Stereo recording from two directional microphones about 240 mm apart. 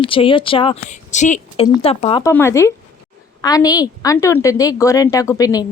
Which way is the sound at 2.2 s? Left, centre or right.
Centre.